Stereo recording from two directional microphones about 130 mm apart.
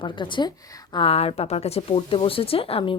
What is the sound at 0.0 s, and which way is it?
Speech, 35° left (ahead or behind).